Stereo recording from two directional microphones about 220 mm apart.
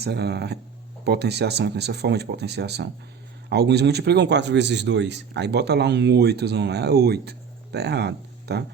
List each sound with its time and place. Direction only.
0.0 s speech: 50° right (ahead or behind)